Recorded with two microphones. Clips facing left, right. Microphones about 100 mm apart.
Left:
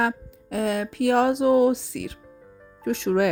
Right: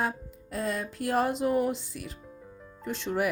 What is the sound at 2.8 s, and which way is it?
Speech, 70° left (ahead or behind).